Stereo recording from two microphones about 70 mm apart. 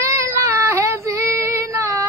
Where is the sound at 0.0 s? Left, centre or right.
Right.